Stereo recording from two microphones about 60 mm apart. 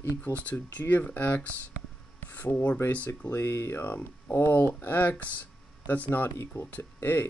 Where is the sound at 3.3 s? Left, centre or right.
Left.